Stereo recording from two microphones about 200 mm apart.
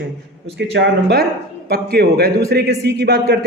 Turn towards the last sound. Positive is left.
turn(degrees=-55)  # may be behind; listen again after turning